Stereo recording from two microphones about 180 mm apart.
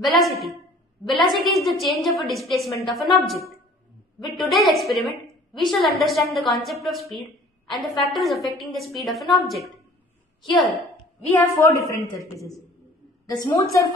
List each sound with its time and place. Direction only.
0.1 s a woman's voice: centre (ahead or behind)
11.3 s a woman's voice: 15° left (ahead or behind)
13.5 s speech: 25° left (ahead or behind)